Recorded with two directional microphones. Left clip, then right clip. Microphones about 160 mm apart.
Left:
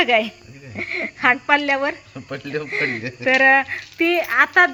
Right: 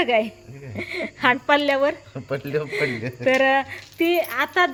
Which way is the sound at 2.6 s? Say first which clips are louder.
Left 2 dB; 15° right (ahead or behind).